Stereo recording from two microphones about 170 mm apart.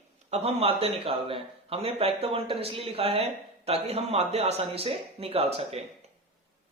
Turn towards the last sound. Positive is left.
turn(degrees=-35)  # may be behind; listen again after turning